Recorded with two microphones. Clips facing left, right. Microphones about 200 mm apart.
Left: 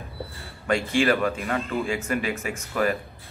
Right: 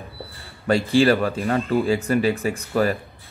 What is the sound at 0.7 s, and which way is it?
Speech, 35° right (ahead or behind).